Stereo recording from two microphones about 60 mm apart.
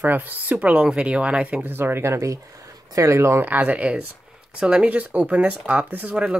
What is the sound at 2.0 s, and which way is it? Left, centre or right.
Speech, right.